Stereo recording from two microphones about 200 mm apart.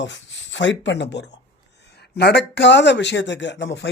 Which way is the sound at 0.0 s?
65° left (ahead or behind).